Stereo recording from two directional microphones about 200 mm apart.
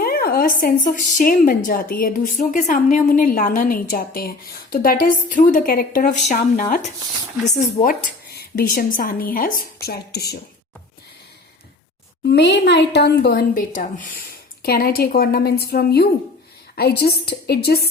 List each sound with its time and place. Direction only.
0.0 s a woman's voice: 50° left (ahead or behind)
8.3 s a woman's voice: 50° left (ahead or behind)
12.2 s a woman's voice: 55° left (ahead or behind)